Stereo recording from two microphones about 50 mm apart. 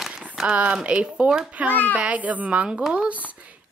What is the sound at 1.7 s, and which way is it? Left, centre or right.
Speech, left.